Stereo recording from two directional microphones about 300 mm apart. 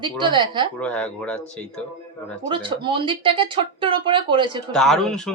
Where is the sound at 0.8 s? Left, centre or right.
Centre.